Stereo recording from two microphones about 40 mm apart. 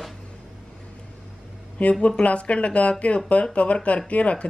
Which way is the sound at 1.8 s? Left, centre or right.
Left.